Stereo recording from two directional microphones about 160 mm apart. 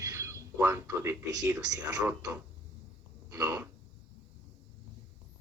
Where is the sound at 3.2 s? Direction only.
20° right (ahead or behind).